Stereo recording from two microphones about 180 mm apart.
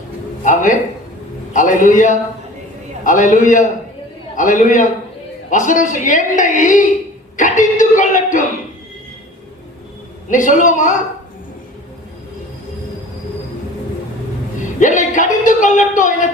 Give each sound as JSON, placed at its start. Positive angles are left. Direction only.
{"t": 0.4, "sound": "a woman's voice", "side_deg": 45}
{"t": 7.3, "sound": "a sound", "side_deg": 45}
{"t": 10.2, "sound": "a woman's voice", "side_deg": 45}
{"t": 14.8, "sound": "a woman's voice", "side_deg": 45}